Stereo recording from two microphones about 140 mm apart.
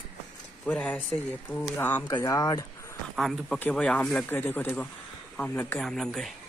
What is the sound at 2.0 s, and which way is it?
Speech, 25° left (ahead or behind).